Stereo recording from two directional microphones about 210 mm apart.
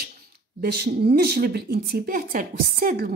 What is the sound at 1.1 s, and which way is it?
A woman's voice, 45° right (ahead or behind).